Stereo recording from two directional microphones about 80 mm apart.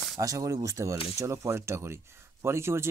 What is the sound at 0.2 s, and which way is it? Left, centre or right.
Speech, right.